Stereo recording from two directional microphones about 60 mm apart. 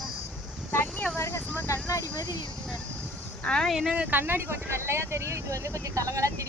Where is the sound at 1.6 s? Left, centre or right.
Left.